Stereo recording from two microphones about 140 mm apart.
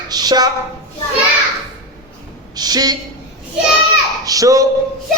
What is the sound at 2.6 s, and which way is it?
Speech, 30° right (ahead or behind).